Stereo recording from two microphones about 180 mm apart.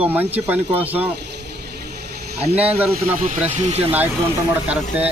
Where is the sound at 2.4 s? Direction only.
35° right (ahead or behind).